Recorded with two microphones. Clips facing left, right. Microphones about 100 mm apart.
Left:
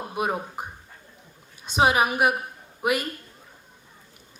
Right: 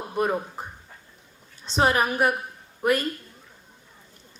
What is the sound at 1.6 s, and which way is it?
A woman's voice, 10° left (ahead or behind).